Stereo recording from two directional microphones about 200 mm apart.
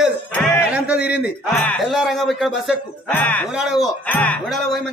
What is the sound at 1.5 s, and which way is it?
A man's voice, 5° left (ahead or behind).